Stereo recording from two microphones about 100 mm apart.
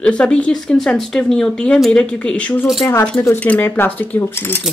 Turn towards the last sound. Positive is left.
turn(degrees=25)  # may be behind; listen again after turning